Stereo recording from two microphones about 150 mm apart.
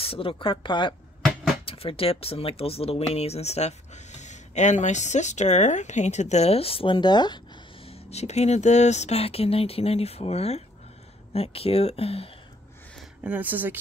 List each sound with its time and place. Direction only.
0.0 s speech: 40° left (ahead or behind)
13.2 s speech: 10° right (ahead or behind)